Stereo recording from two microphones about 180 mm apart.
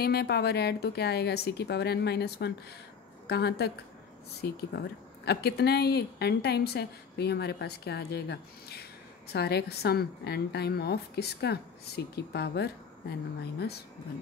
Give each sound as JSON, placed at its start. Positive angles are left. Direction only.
{"t": 0.0, "sound": "speech", "side_deg": 65}